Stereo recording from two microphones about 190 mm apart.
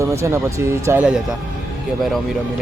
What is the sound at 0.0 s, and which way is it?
Speech, 15° right (ahead or behind).